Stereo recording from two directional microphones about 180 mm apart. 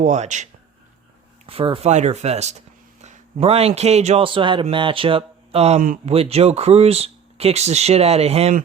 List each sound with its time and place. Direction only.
0.0 s speech: 40° right (ahead or behind)
1.5 s speech: 30° right (ahead or behind)